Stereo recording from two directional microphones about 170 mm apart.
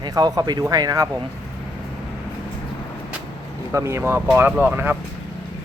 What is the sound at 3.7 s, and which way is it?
Speech, 15° right (ahead or behind).